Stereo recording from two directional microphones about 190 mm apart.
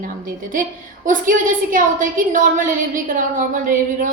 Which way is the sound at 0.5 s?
45° right (ahead or behind).